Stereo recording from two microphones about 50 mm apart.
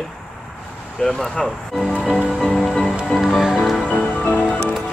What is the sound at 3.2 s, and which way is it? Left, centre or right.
Music, centre.